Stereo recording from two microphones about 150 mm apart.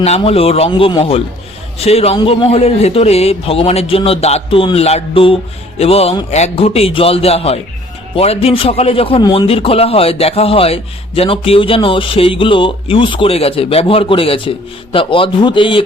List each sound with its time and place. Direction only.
0.0 s a man's voice: 45° left (ahead or behind)